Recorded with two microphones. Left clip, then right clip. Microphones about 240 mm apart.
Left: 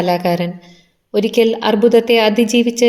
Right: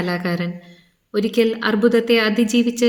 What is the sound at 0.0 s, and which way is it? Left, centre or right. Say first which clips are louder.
A woman's voice: left 8 dB; right.